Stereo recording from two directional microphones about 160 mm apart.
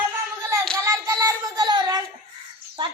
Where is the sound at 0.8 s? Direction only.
20° right (ahead or behind).